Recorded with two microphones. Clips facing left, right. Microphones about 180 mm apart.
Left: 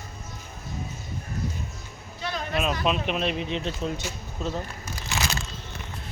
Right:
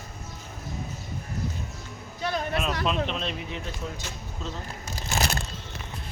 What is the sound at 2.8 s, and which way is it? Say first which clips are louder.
Speech: left 2 dB; 10° left (ahead or behind).